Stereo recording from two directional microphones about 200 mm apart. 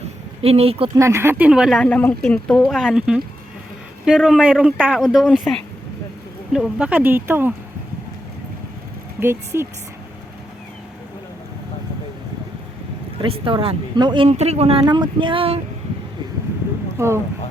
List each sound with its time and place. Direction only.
0.4 s speech: 30° right (ahead or behind)
0.9 s speech: 15° right (ahead or behind)
9.2 s speech: 15° right (ahead or behind)
13.2 s speech: 25° right (ahead or behind)
17.0 s speech: 15° right (ahead or behind)